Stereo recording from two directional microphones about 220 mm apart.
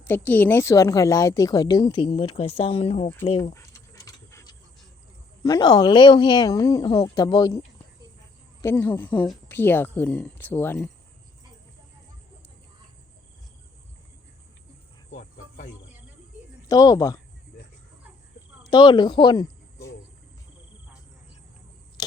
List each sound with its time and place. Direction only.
0.3 s a woman's voice: 10° left (ahead or behind); by 3.5 s 25° left (ahead or behind)
3.5 s a sound: 15° left (ahead or behind)
5.4 s speech: 20° left (ahead or behind)
8.6 s a woman's voice: 10° left (ahead or behind)
15.1 s cricket: 35° left (ahead or behind)
16.6 s a woman's voice: 15° left (ahead or behind)
18.7 s speech: 20° left (ahead or behind)